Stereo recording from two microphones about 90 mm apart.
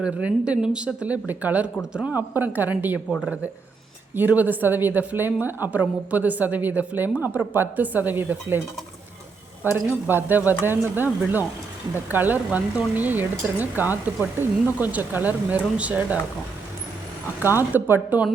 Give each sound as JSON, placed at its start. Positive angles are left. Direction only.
{"t": 0.0, "sound": "speech", "side_deg": -15}
{"t": 2.1, "sound": "a woman's voice", "side_deg": -20}
{"t": 4.1, "sound": "a woman's voice", "side_deg": -20}
{"t": 9.6, "sound": "a woman's voice", "side_deg": -20}
{"t": 17.4, "sound": "a woman's voice", "side_deg": -25}